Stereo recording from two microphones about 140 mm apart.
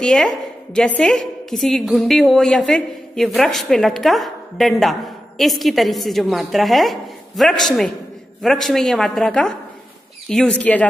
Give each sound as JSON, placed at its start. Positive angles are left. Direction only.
{"t": 0.0, "sound": "a woman's voice", "side_deg": 5}